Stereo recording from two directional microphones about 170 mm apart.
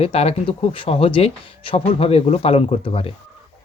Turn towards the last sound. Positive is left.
turn(degrees=35)  # may be behind; listen again after turning